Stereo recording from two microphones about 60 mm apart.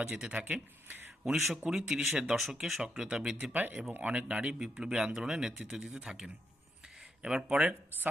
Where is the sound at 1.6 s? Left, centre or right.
Centre.